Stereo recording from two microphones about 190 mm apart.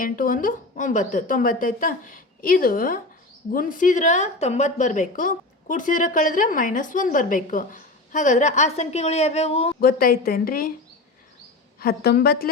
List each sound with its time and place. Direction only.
0.0 s a woman's voice: 45° left (ahead or behind); by 9.7 s 30° left (ahead or behind)
9.8 s a woman's voice: 50° left (ahead or behind)
11.8 s a woman's voice: 50° left (ahead or behind)